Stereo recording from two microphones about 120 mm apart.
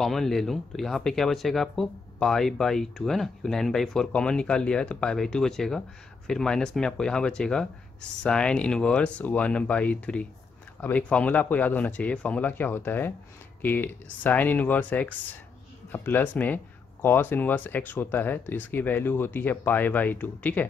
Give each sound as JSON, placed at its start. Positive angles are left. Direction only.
{"t": 0.0, "sound": "speech", "side_deg": 0}